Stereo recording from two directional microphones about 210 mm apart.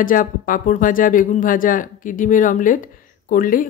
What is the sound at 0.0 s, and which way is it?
Speech, 40° left (ahead or behind).